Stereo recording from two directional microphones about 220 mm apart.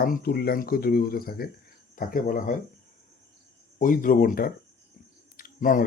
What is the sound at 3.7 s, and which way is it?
Speech, 40° left (ahead or behind).